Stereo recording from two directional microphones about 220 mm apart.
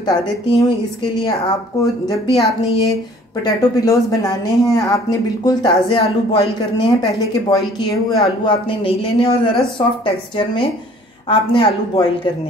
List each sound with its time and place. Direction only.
0.0 s speech: 20° left (ahead or behind)
1.8 s a woman's voice: 15° left (ahead or behind)
3.4 s a woman's voice: 15° left (ahead or behind)